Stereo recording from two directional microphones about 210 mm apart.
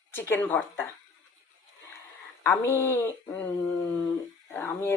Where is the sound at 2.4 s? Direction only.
15° left (ahead or behind).